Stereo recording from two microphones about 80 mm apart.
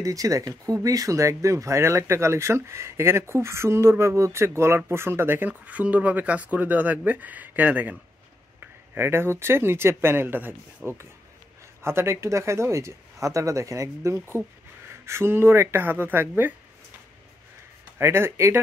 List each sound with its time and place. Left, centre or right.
0.0 s speech: right
10.8 s speech: centre
11.8 s speech: right
17.9 s speech: right